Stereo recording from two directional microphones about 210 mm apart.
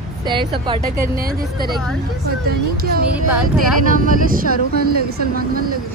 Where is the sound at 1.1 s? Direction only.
45° right (ahead or behind).